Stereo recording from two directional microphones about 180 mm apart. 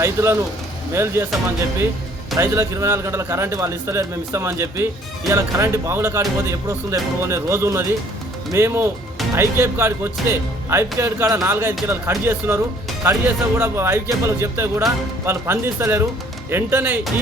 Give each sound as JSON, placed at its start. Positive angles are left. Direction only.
{"t": 0.0, "sound": "speech", "side_deg": -15}
{"t": 2.4, "sound": "speech", "side_deg": -15}